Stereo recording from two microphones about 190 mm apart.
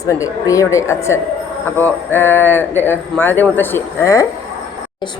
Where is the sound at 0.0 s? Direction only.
15° left (ahead or behind).